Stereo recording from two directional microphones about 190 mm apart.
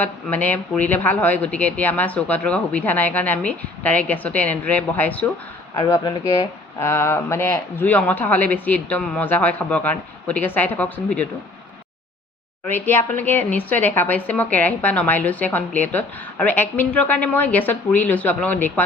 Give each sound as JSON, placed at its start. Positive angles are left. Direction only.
{"t": 0.0, "sound": "speech", "side_deg": 10}
{"t": 12.6, "sound": "speech", "side_deg": 10}